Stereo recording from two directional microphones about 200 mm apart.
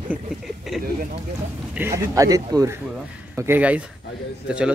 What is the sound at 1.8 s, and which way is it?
Speech, 15° right (ahead or behind).